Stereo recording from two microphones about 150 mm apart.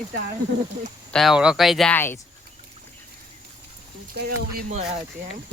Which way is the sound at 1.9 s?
15° left (ahead or behind).